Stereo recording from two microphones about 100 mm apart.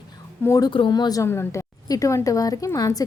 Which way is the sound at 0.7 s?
50° left (ahead or behind).